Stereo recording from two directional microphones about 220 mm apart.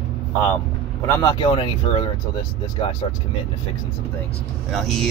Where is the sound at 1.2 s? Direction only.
20° left (ahead or behind).